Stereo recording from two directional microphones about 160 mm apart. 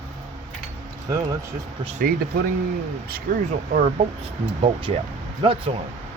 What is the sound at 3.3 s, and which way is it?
Speech, 60° right (ahead or behind).